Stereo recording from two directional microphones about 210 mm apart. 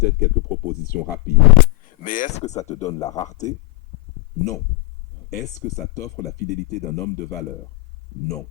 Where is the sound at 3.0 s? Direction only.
15° left (ahead or behind).